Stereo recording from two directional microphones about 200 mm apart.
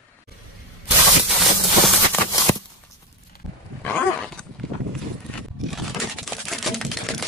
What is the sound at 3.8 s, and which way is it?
Dog, 5° left (ahead or behind).